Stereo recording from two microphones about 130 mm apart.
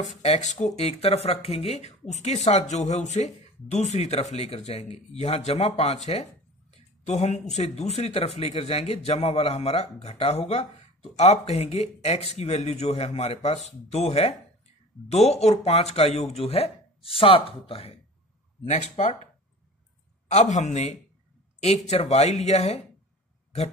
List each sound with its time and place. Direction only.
0.0 s speech: 65° left (ahead or behind)
6.7 s a sound: 60° left (ahead or behind)
7.5 s speech: 55° left (ahead or behind)
18.7 s speech: 65° left (ahead or behind)
20.2 s speech: 65° left (ahead or behind)